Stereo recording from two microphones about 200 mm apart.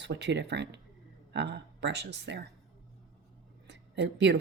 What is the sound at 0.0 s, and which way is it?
Speech, 60° right (ahead or behind).